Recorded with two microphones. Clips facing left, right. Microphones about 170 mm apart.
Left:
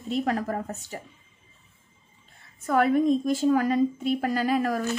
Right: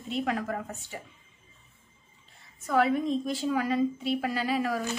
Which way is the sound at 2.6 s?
50° left (ahead or behind).